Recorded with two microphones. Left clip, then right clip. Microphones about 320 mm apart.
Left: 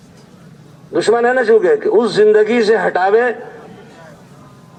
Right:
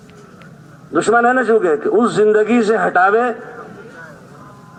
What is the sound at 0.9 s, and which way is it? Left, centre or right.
A man's voice, left.